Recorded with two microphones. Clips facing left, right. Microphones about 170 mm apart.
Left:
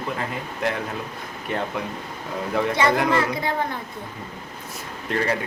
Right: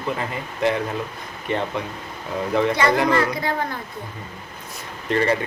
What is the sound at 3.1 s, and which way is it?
Speech, 25° left (ahead or behind).